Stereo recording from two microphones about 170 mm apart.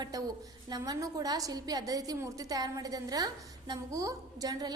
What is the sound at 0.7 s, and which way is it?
A woman's voice, 20° right (ahead or behind).